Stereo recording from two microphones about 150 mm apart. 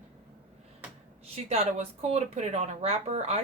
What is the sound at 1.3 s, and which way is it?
A woman's voice, 45° right (ahead or behind).